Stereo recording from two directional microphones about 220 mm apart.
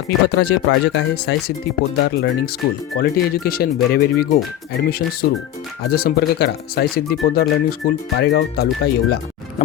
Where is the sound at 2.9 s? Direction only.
45° left (ahead or behind).